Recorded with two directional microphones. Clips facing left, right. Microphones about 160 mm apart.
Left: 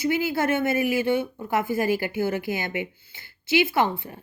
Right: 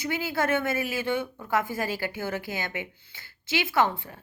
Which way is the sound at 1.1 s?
10° left (ahead or behind).